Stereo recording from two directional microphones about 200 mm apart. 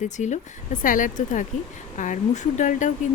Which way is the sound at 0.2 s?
40° left (ahead or behind).